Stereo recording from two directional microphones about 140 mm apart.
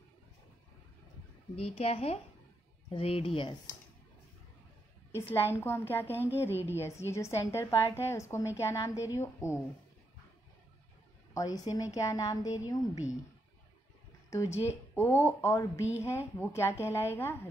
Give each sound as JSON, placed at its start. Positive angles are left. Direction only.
{"t": 1.6, "sound": "a woman's voice", "side_deg": 45}
{"t": 5.3, "sound": "a woman's voice", "side_deg": 15}
{"t": 11.3, "sound": "a woman's voice", "side_deg": 25}
{"t": 14.3, "sound": "a woman's voice", "side_deg": 20}